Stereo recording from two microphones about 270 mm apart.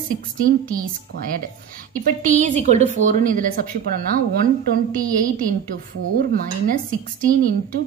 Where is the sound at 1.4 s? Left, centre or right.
Right.